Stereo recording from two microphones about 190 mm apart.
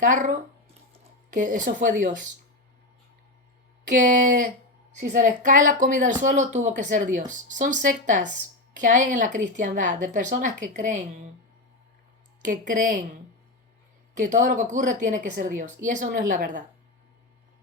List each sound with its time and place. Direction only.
0.0 s a woman's voice: 45° right (ahead or behind)
0.9 s a sound: 45° right (ahead or behind)
3.9 s a woman's voice: 45° right (ahead or behind)
12.4 s a woman's voice: 45° right (ahead or behind)
14.2 s a woman's voice: 40° right (ahead or behind)